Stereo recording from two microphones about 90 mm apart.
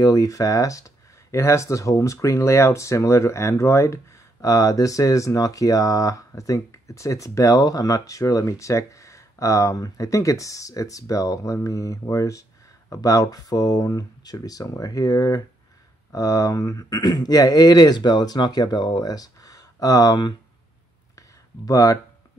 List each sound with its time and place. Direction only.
0.0 s speech: 40° left (ahead or behind)
21.6 s speech: 40° left (ahead or behind)